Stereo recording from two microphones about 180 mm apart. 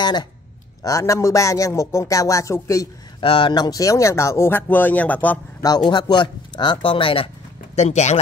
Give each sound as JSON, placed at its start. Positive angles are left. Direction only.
{"t": 0.0, "sound": "speech", "side_deg": 25}
{"t": 3.2, "sound": "speech", "side_deg": 30}
{"t": 5.9, "sound": "speech", "side_deg": 25}